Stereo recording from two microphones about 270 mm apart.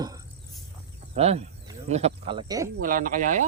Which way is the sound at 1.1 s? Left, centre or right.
Right.